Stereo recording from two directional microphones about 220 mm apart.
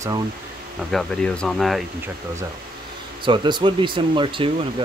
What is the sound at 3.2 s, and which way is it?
Speech, 20° right (ahead or behind).